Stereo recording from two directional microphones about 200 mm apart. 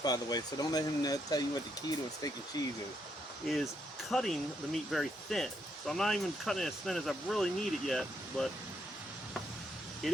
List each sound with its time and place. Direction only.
0.0 s speech: 20° left (ahead or behind)
3.4 s speech: centre (ahead or behind)